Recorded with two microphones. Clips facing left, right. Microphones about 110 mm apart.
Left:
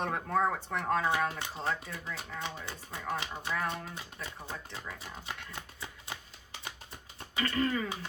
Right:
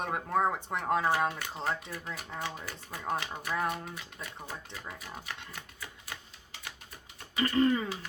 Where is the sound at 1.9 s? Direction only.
25° left (ahead or behind).